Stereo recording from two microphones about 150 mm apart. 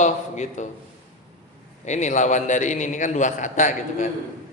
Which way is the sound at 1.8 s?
50° left (ahead or behind).